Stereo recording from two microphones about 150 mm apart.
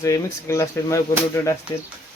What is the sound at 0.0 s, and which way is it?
Speech, 20° left (ahead or behind).